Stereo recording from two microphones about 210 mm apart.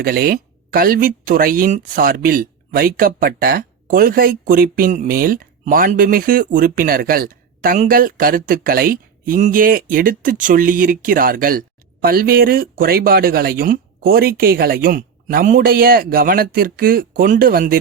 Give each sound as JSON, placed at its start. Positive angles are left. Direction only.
{"t": 0.0, "sound": "speech", "side_deg": -45}